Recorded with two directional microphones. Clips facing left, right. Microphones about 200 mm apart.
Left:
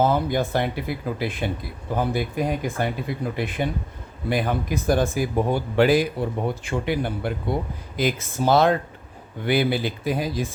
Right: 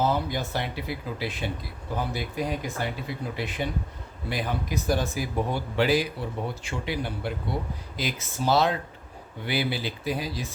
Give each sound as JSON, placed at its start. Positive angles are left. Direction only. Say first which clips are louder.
{"t": 0.0, "sound": "speech", "louder": "left 5 dB", "side_deg": 50}